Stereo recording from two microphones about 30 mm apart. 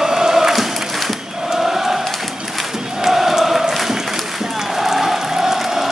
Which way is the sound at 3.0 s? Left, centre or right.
Centre.